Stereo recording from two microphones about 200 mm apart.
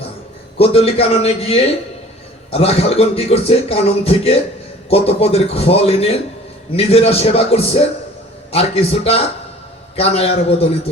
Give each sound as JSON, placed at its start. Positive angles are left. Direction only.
{"t": 0.6, "sound": "a man's voice", "side_deg": 30}